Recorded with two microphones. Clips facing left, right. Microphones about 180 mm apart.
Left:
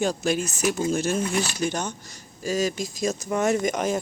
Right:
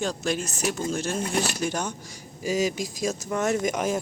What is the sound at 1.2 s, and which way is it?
Speech, 50° right (ahead or behind).